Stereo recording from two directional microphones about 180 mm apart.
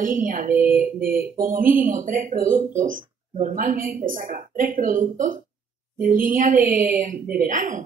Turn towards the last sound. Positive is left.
turn(degrees=-45)  # may be behind; listen again after turning